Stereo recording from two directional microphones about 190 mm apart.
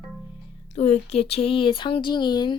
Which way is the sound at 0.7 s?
35° left (ahead or behind).